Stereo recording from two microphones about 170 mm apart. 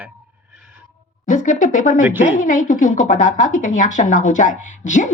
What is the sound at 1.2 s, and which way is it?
Speech, 50° left (ahead or behind).